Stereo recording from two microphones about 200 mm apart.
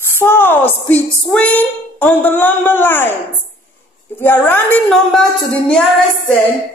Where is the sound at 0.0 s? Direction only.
10° left (ahead or behind).